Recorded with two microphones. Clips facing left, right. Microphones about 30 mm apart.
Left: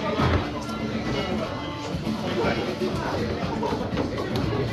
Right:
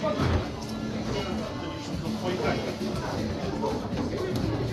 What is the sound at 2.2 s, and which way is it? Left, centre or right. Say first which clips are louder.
Music: left 3 dB; left.